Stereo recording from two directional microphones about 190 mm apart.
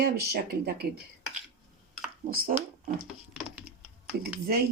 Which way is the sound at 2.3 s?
50° right (ahead or behind).